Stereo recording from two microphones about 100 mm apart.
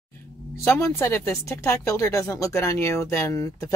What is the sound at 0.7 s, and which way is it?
Speech, 30° left (ahead or behind).